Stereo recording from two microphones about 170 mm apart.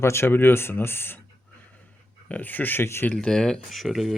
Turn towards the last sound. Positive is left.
turn(degrees=0)  # may be behind; listen again after turning